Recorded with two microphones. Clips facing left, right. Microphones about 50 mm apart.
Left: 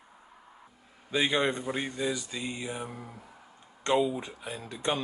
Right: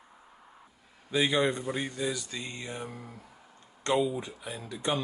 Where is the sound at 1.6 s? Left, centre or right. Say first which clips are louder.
Left 1 dB; centre.